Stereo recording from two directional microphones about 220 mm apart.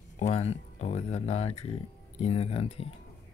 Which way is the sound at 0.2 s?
30° left (ahead or behind).